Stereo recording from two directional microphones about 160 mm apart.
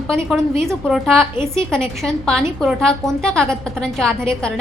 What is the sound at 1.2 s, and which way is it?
Speech, 15° right (ahead or behind).